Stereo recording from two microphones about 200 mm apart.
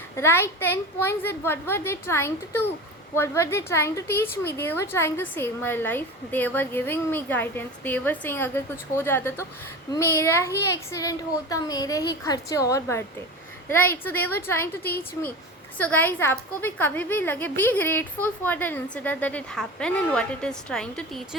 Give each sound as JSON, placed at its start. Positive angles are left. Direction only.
{"t": 0.2, "sound": "a woman's voice", "side_deg": 15}